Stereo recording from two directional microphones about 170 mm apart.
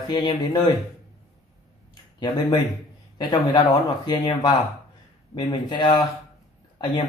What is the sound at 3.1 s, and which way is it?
Speech, 25° left (ahead or behind).